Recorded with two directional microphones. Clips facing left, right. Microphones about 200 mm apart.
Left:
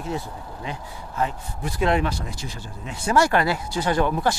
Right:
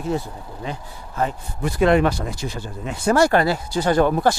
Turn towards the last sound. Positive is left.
turn(degrees=-40)  # may be behind; listen again after turning